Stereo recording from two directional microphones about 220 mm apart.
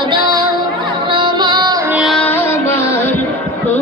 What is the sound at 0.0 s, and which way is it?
Music, 20° right (ahead or behind).